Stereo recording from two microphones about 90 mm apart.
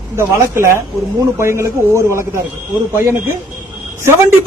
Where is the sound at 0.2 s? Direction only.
30° right (ahead or behind).